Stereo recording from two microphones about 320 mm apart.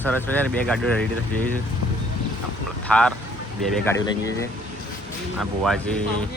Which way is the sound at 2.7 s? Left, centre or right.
Centre.